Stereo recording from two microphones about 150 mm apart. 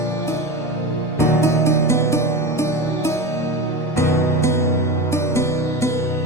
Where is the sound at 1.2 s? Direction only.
20° left (ahead or behind).